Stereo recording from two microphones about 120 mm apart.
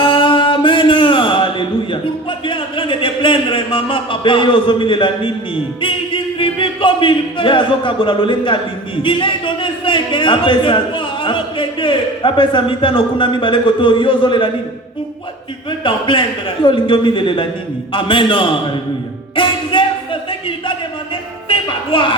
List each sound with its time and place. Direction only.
0.0 s mantra: 45° left (ahead or behind)
2.5 s a sound: 45° left (ahead or behind)
5.8 s music: 45° left (ahead or behind)
9.0 s a man's voice: 45° left (ahead or behind)
15.8 s a man's voice: 45° left (ahead or behind)
19.4 s music: 45° left (ahead or behind)
21.5 s music: 45° left (ahead or behind)